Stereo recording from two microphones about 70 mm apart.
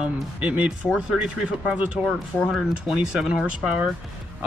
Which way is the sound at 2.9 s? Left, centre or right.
Centre.